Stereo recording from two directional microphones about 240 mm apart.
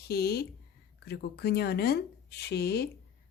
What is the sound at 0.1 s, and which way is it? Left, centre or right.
Speech, left.